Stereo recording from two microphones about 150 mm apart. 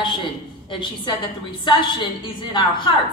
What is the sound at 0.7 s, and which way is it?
A woman's voice, 30° left (ahead or behind).